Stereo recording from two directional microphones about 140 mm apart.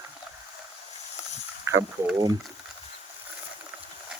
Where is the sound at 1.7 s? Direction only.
20° right (ahead or behind).